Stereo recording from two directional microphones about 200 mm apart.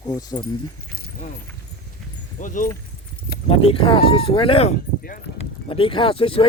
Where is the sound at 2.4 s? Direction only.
40° left (ahead or behind).